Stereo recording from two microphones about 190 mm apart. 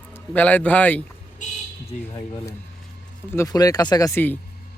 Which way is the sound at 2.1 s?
15° left (ahead or behind).